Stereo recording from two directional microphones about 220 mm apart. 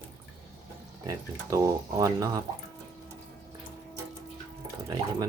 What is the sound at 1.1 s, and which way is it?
Speech, 15° right (ahead or behind).